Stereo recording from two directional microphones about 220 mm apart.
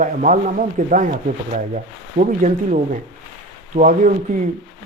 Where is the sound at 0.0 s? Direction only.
35° right (ahead or behind).